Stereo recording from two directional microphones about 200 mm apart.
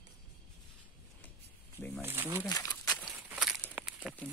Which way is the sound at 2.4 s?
15° left (ahead or behind).